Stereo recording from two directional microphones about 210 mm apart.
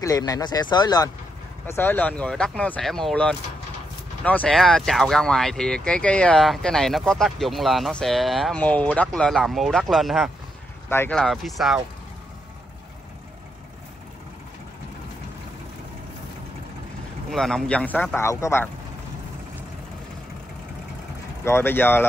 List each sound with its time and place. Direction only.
0.0 s speech: 15° left (ahead or behind); by 11.8 s centre (ahead or behind)
17.3 s speech: centre (ahead or behind)
21.5 s speech: 10° left (ahead or behind)